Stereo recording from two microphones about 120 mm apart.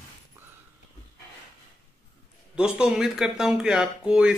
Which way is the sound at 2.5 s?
5° right (ahead or behind).